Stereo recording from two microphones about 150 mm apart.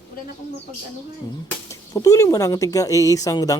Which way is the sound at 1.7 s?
20° left (ahead or behind).